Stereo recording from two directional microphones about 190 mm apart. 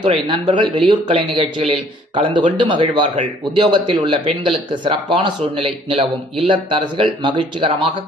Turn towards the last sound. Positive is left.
turn(degrees=-25)  # may be behind; listen again after turning